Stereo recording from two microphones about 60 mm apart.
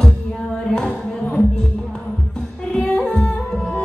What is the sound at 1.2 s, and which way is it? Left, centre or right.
Music, centre.